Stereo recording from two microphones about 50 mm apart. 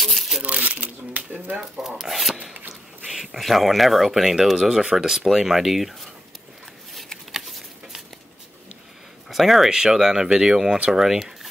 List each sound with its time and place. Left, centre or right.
0.0 s crumpling: centre
0.4 s shuffling cards: right
1.6 s speech: centre
2.7 s a sound: centre
3.3 s speech: centre
6.9 s a sound: centre
9.3 s speech: centre